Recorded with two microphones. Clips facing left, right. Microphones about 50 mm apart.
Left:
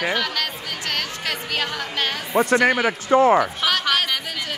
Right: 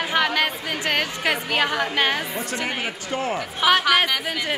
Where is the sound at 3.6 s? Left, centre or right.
Centre.